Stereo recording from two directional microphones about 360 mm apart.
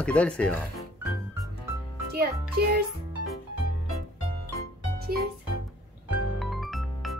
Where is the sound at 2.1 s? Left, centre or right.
Right.